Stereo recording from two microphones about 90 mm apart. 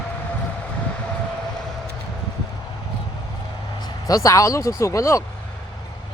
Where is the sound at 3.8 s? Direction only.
45° left (ahead or behind).